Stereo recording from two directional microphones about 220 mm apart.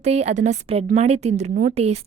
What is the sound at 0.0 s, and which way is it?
Speech, 30° right (ahead or behind).